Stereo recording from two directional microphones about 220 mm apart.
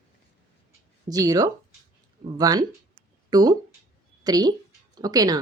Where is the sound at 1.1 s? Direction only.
15° right (ahead or behind).